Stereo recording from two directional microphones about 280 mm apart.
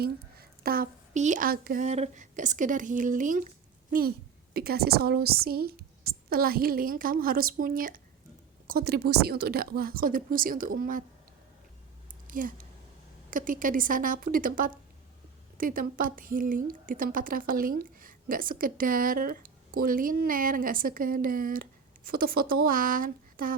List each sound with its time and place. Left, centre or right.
0.0 s a woman's voice: right
4.5 s a woman's voice: right
12.3 s a woman's voice: right